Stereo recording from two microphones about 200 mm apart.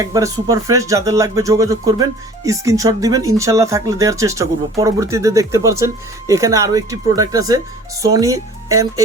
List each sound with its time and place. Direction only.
0.0 s speech: 15° right (ahead or behind)